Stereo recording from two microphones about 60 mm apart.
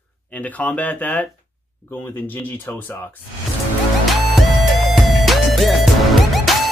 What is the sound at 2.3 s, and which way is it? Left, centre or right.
Speech, left.